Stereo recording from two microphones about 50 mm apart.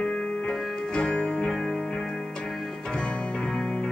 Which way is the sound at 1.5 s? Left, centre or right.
Centre.